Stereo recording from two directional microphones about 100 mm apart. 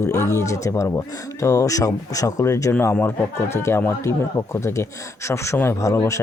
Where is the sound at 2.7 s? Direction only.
20° left (ahead or behind).